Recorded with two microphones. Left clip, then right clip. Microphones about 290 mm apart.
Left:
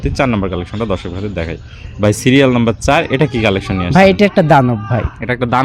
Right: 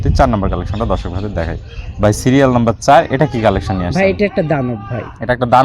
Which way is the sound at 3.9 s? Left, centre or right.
Left.